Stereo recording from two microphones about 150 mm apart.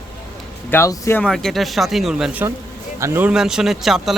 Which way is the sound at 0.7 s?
20° left (ahead or behind).